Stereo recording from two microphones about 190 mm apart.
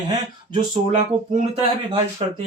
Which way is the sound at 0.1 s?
25° right (ahead or behind).